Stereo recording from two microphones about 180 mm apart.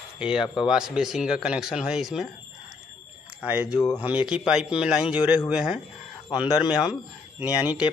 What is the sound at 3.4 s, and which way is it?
Speech, 5° right (ahead or behind).